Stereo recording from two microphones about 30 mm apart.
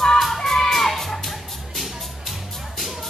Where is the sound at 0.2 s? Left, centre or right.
Centre.